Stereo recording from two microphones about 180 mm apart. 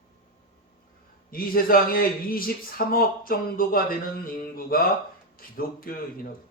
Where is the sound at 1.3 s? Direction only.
55° left (ahead or behind).